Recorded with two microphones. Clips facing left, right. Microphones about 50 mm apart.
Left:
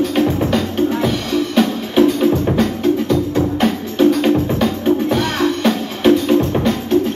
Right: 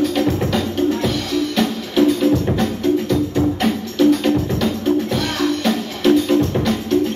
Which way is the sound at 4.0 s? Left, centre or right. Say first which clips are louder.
Left 2 dB; left.